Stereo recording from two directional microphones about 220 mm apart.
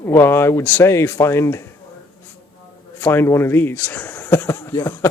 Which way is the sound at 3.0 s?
10° left (ahead or behind).